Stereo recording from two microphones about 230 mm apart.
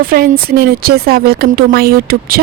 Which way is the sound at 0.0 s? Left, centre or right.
Right.